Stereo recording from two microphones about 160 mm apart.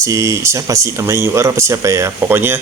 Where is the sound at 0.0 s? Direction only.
20° right (ahead or behind).